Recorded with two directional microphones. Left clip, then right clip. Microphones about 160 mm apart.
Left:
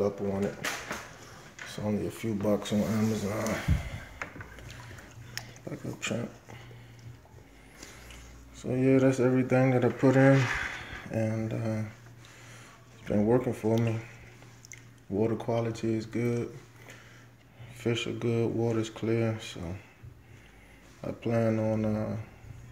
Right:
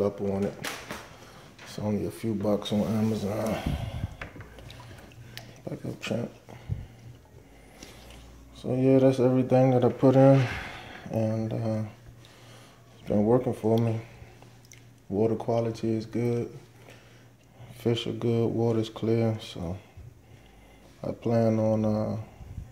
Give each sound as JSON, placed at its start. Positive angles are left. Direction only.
{"t": 0.0, "sound": "speech", "side_deg": -10}
{"t": 1.7, "sound": "speech", "side_deg": -15}
{"t": 2.2, "sound": "speech", "side_deg": -5}
{"t": 5.3, "sound": "a sound", "side_deg": -25}
{"t": 6.0, "sound": "speech", "side_deg": -15}
{"t": 8.6, "sound": "speech", "side_deg": -20}
{"t": 10.9, "sound": "a sound", "side_deg": -20}
{"t": 13.0, "sound": "speech", "side_deg": -10}
{"t": 17.7, "sound": "speech", "side_deg": -30}
{"t": 21.0, "sound": "speech", "side_deg": -20}